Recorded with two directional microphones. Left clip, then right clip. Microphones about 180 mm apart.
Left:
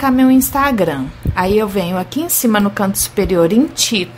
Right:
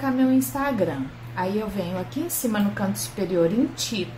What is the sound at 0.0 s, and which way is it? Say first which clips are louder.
A woman's voice: left 10 dB; 50° left (ahead or behind).